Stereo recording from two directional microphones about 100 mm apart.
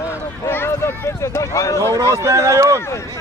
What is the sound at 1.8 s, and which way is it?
A man's voice, 30° right (ahead or behind).